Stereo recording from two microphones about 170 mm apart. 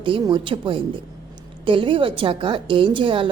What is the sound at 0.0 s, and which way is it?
A woman's voice, 30° right (ahead or behind).